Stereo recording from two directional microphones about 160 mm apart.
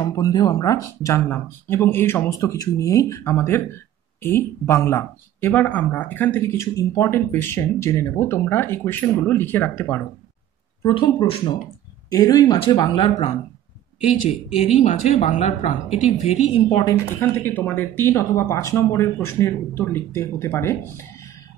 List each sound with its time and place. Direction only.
0.0 s speech: 25° left (ahead or behind)
11.0 s speech: 35° left (ahead or behind)
12.1 s speech: 25° left (ahead or behind)
14.3 s speech: 40° left (ahead or behind)
17.2 s speech: 15° left (ahead or behind)